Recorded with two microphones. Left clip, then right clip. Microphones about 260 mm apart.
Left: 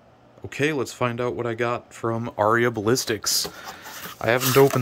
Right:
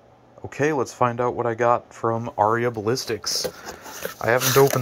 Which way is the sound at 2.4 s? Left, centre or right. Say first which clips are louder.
Left 1 dB; left.